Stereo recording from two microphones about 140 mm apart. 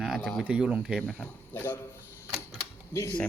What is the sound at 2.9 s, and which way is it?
Speech, 20° left (ahead or behind).